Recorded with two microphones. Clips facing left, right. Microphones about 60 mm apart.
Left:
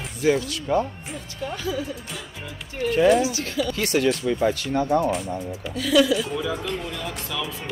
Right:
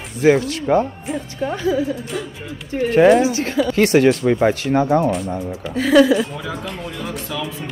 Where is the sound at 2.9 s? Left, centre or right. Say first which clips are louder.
Right 6 dB; right.